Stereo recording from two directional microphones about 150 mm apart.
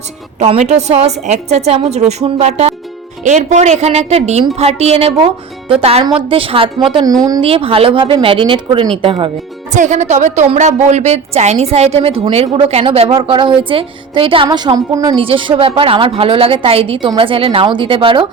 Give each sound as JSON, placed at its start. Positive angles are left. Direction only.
{"t": 0.3, "sound": "a woman's voice", "side_deg": -45}
{"t": 9.7, "sound": "a woman's voice", "side_deg": -55}
{"t": 15.2, "sound": "speech", "side_deg": -35}